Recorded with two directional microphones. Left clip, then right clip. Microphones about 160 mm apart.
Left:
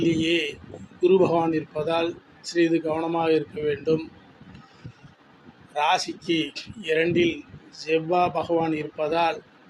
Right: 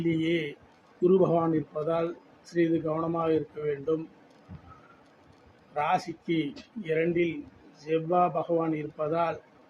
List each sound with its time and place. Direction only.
0.2 s speech: 5° left (ahead or behind)
5.7 s a man's voice: 15° left (ahead or behind)
6.0 s speech: 5° left (ahead or behind)